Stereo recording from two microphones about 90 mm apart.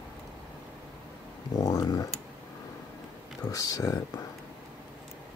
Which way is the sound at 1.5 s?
45° left (ahead or behind).